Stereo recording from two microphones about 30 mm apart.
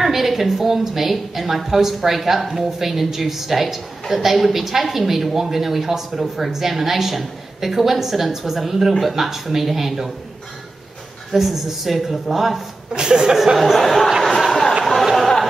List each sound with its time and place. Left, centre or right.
0.0 s a woman's voice: centre
11.3 s a woman's voice: centre
12.9 s speech: right
13.7 s a woman's voice: centre
14.2 s a sound: centre